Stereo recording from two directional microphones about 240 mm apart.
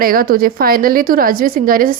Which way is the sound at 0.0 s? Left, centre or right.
Right.